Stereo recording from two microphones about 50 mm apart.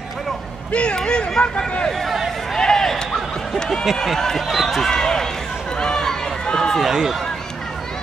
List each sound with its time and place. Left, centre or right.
0.7 s speech: left
1.9 s speech: centre
2.5 s a sound: centre
3.5 s speech: centre
5.8 s run: centre
6.8 s speech: centre